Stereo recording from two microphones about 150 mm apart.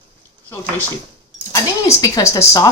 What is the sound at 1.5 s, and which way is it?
Dishes, 20° left (ahead or behind).